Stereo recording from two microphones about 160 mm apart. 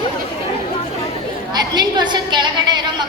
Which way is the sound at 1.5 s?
25° right (ahead or behind).